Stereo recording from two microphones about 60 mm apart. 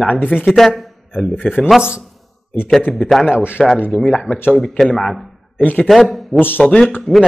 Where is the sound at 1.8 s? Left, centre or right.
Centre.